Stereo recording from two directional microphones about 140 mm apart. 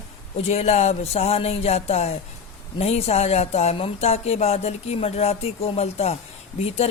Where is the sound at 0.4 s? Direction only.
50° left (ahead or behind).